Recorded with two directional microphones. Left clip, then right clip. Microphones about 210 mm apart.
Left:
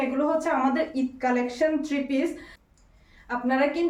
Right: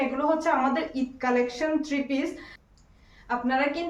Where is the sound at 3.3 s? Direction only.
10° right (ahead or behind).